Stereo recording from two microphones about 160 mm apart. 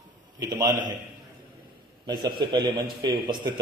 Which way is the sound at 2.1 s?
25° right (ahead or behind).